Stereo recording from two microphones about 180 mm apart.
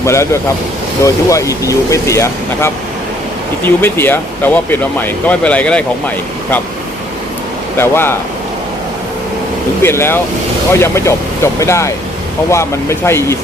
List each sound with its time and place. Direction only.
0.0 s speech: 15° left (ahead or behind)
3.8 s speech: 10° left (ahead or behind)
7.8 s speech: 15° left (ahead or behind)
9.8 s speech: 15° left (ahead or behind)